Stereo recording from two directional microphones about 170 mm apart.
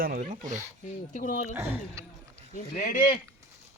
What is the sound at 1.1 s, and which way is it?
Speech, 50° left (ahead or behind).